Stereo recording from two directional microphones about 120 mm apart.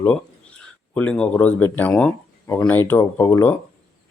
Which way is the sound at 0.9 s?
10° left (ahead or behind).